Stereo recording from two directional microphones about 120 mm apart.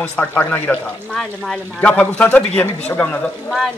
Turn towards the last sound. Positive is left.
turn(degrees=10)  # may be behind; listen again after turning